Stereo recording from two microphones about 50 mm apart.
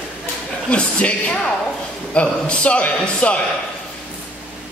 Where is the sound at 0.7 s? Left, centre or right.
Left.